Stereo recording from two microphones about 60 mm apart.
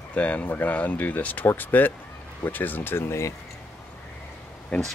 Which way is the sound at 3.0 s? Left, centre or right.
Left.